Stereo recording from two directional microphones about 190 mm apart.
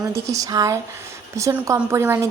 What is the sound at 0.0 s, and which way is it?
A woman's voice, 15° right (ahead or behind).